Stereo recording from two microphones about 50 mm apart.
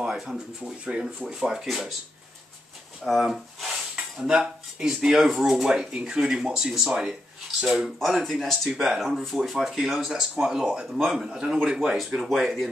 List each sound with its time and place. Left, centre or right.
0.0 s speech: centre
3.0 s dishes: centre
4.2 s speech: centre
8.2 s speech: centre
8.9 s speech: centre
12.0 s speech: centre